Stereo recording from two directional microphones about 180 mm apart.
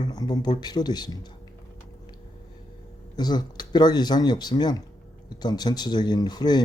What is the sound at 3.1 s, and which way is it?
Speech, 25° left (ahead or behind).